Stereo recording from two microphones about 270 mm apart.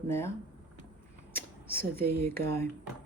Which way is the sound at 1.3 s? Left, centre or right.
Centre.